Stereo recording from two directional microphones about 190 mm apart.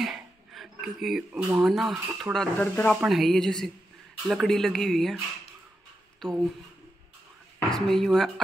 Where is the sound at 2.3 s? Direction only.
5° left (ahead or behind).